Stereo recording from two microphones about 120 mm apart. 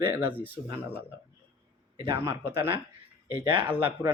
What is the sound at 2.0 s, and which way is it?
Speech, 45° right (ahead or behind).